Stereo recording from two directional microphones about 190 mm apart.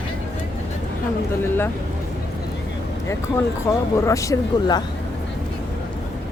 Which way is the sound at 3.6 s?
15° left (ahead or behind).